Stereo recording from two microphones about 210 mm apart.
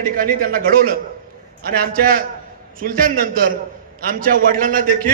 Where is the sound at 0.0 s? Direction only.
45° right (ahead or behind).